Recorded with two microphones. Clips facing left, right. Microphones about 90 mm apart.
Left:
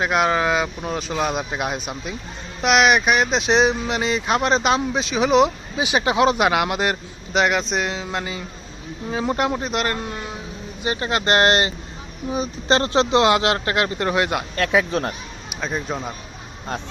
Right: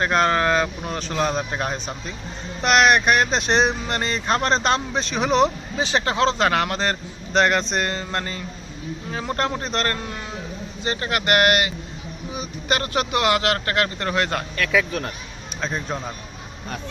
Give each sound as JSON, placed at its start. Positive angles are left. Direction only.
{"t": 0.0, "sound": "speech", "side_deg": 5}
{"t": 10.8, "sound": "speech", "side_deg": 20}
{"t": 14.5, "sound": "speech", "side_deg": 35}
{"t": 15.6, "sound": "speech", "side_deg": 5}